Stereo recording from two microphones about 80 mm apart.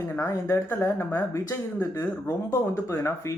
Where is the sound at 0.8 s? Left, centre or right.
Left.